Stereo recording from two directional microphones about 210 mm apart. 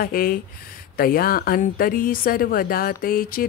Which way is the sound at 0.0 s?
45° left (ahead or behind).